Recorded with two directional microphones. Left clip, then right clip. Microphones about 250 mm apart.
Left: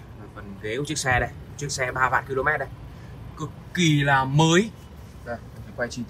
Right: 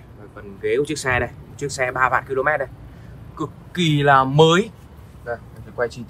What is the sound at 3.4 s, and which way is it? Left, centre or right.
Speech, centre.